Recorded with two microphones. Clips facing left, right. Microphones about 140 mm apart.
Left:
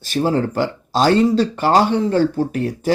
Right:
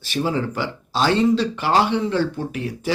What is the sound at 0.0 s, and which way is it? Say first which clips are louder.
Speech: left 4 dB; 40° left (ahead or behind).